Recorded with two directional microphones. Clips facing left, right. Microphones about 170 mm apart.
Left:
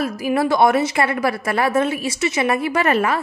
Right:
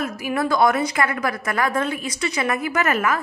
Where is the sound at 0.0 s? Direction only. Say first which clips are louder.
Left 4 dB; 30° left (ahead or behind).